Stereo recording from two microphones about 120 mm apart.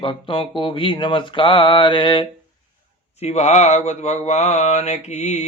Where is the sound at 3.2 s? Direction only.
65° left (ahead or behind).